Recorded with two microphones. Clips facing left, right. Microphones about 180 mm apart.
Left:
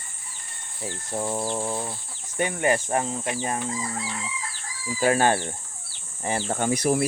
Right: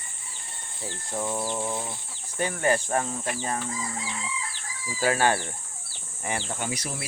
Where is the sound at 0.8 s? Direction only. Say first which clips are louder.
Left 2 dB; 20° left (ahead or behind).